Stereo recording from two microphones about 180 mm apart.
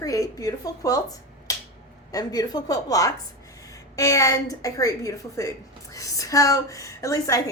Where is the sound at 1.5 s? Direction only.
20° left (ahead or behind).